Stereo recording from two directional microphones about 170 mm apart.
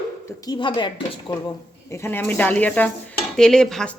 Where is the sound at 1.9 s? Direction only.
15° left (ahead or behind).